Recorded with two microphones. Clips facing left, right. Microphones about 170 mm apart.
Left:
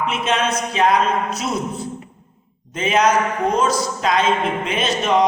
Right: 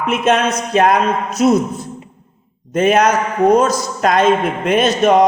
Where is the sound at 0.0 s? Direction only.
50° right (ahead or behind).